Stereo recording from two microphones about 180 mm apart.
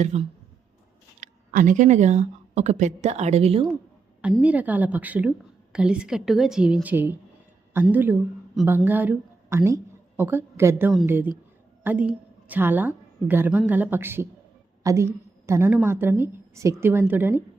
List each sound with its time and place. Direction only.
0.0 s speech: 35° right (ahead or behind)
4.2 s a woman's voice: 5° right (ahead or behind)